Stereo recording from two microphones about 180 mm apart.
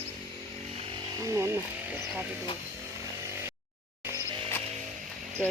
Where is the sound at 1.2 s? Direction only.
15° right (ahead or behind).